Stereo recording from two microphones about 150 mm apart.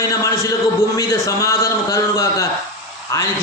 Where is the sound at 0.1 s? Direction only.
20° left (ahead or behind).